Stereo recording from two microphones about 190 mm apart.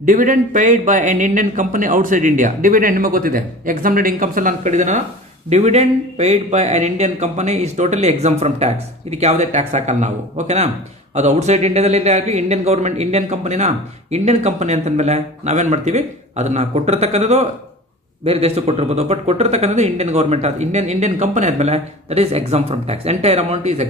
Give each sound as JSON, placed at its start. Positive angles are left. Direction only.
{"t": 0.0, "sound": "a man's voice", "side_deg": -45}